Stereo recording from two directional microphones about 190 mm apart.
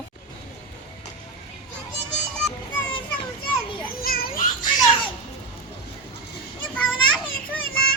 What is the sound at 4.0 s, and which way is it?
Children playing, 50° left (ahead or behind).